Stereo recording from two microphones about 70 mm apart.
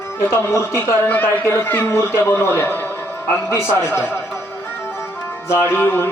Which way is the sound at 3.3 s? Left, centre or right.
Left.